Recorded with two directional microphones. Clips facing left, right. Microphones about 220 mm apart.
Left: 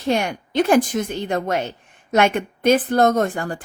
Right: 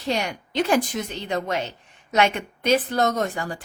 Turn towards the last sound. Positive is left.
turn(degrees=50)  # may be behind; listen again after turning